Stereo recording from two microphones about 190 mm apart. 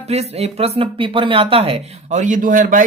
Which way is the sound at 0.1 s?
35° right (ahead or behind).